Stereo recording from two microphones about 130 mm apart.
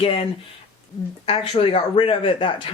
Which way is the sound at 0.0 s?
45° left (ahead or behind).